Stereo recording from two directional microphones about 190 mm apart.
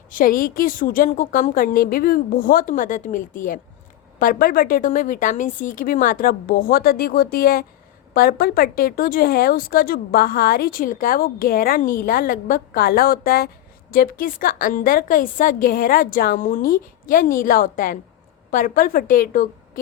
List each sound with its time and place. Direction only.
0.1 s a woman's voice: 45° left (ahead or behind)